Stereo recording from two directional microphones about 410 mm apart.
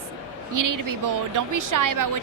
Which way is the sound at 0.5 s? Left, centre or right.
Right.